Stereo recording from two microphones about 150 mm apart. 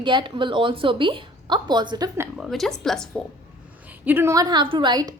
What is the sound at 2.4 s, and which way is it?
Speech, centre (ahead or behind).